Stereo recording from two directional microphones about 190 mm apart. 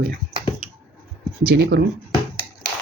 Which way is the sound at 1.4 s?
55° right (ahead or behind).